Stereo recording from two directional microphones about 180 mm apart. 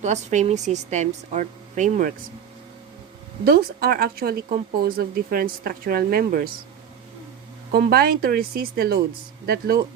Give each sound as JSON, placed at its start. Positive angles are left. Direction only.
{"t": 0.0, "sound": "a woman's voice", "side_deg": -40}
{"t": 3.4, "sound": "speech", "side_deg": -55}
{"t": 7.7, "sound": "speech", "side_deg": -60}